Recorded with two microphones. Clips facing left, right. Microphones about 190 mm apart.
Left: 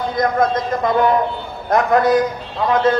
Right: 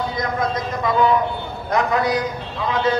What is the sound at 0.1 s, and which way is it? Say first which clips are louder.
A man's voice: left 6 dB; 50° left (ahead or behind).